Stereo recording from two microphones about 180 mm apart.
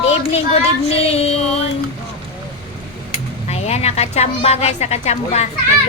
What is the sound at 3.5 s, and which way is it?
A woman's voice, 35° left (ahead or behind).